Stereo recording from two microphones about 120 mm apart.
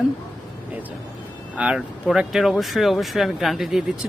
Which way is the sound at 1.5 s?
5° right (ahead or behind).